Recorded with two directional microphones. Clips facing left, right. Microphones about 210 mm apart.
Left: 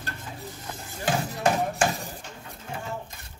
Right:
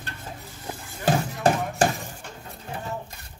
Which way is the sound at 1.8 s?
35° right (ahead or behind).